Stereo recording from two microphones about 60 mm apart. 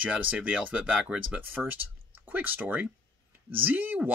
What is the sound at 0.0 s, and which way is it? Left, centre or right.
Speech, right.